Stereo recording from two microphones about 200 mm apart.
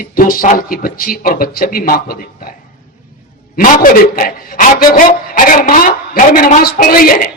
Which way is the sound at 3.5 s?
45° left (ahead or behind).